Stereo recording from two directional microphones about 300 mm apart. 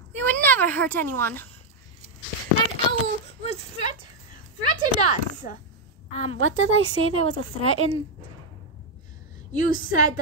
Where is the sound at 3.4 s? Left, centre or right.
Left.